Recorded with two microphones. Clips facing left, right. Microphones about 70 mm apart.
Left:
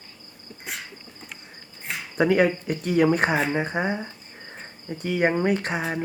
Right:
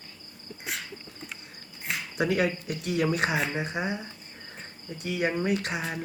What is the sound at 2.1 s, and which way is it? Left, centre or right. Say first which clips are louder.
Speech: left 7 dB; left.